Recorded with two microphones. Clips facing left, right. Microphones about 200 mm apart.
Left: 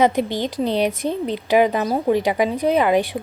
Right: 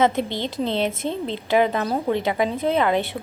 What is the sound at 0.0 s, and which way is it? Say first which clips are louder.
A woman's voice: left 3 dB; 15° left (ahead or behind).